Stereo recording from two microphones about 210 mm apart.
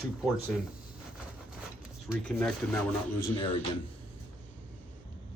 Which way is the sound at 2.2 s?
5° left (ahead or behind).